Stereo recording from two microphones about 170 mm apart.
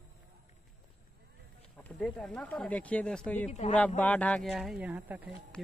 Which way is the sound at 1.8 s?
5° left (ahead or behind).